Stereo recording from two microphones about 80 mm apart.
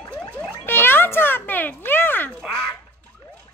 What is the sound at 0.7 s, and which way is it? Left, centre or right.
Speech, left.